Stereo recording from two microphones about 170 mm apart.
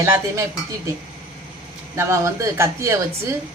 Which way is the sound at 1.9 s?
15° right (ahead or behind).